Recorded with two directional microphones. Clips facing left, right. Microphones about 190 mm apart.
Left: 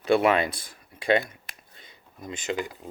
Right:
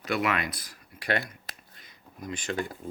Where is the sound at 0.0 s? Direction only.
30° left (ahead or behind).